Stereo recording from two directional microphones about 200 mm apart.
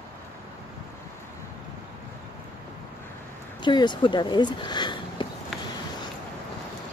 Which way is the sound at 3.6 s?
20° left (ahead or behind).